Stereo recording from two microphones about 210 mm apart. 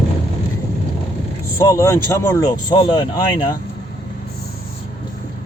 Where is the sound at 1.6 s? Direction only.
15° left (ahead or behind).